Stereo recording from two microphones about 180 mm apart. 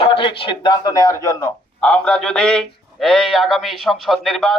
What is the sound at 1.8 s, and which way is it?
A man's voice, 5° left (ahead or behind).